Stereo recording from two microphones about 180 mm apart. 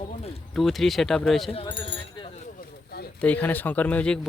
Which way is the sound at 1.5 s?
30° left (ahead or behind).